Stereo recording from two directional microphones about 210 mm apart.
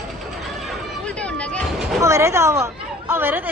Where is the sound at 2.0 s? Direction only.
15° right (ahead or behind).